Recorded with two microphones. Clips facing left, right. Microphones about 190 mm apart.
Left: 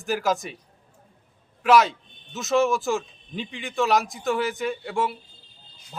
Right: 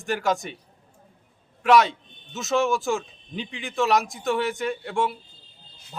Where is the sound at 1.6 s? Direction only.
Centre (ahead or behind).